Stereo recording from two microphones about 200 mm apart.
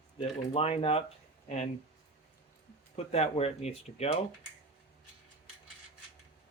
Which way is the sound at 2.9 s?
30° left (ahead or behind).